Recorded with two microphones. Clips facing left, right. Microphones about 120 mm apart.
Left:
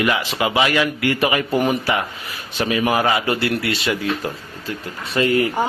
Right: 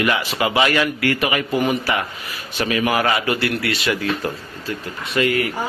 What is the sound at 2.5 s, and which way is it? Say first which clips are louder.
A man's voice: left 1 dB; 20° left (ahead or behind).